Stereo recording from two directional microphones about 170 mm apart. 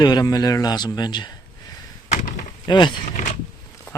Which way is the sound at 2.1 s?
45° left (ahead or behind).